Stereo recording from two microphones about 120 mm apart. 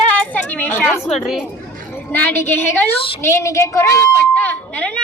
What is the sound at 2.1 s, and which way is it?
A woman's voice, 15° left (ahead or behind).